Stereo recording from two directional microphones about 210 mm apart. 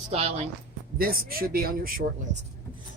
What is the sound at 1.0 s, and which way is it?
Speech, 45° right (ahead or behind).